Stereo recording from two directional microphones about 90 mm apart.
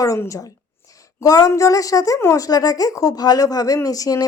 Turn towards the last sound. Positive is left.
turn(degrees=40)  # may be behind; listen again after turning